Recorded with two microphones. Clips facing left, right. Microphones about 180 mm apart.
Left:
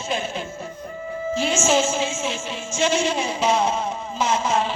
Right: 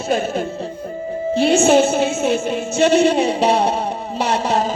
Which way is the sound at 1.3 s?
60° right (ahead or behind).